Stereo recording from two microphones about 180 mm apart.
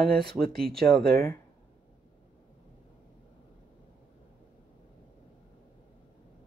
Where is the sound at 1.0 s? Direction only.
60° right (ahead or behind).